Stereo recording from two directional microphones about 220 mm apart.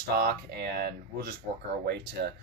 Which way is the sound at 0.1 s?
45° right (ahead or behind).